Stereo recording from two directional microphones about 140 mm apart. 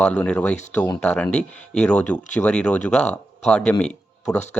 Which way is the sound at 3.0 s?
55° left (ahead or behind).